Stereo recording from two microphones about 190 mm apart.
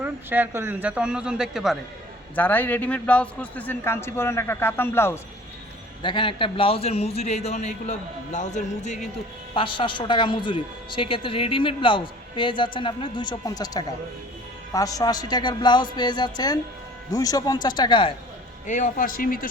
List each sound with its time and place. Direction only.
0.0 s a man's voice: 10° right (ahead or behind)
2.3 s a man's voice: 10° left (ahead or behind)
6.0 s a man's voice: 25° left (ahead or behind)
9.6 s a woman's voice: 25° left (ahead or behind)
18.6 s a man's voice: 45° left (ahead or behind)